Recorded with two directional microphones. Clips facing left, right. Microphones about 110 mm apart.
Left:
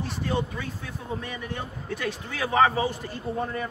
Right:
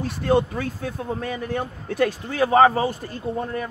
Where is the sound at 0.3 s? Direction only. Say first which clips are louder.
Right 10 dB; 55° right (ahead or behind).